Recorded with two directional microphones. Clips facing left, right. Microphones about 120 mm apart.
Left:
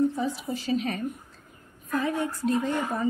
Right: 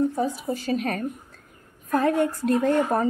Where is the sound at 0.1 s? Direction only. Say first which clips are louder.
Right 4 dB; 45° right (ahead or behind).